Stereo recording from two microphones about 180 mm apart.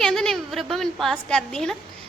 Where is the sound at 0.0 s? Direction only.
Centre (ahead or behind).